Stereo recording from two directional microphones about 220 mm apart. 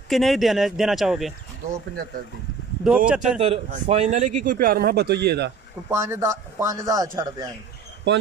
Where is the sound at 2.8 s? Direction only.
Centre (ahead or behind).